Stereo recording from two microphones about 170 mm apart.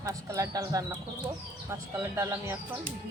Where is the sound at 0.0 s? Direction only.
20° right (ahead or behind).